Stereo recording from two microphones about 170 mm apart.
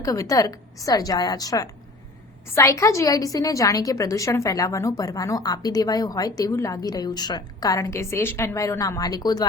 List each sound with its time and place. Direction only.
0.0 s a woman's voice: 20° left (ahead or behind)